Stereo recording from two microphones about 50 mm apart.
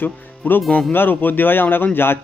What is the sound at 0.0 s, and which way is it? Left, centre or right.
Speech, left.